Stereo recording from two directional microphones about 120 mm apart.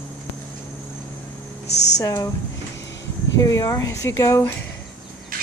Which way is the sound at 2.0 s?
30° left (ahead or behind).